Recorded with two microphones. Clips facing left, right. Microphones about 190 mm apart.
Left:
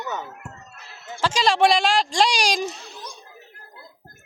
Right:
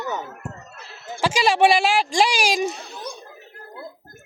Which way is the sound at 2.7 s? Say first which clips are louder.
Right 5 dB; 55° right (ahead or behind).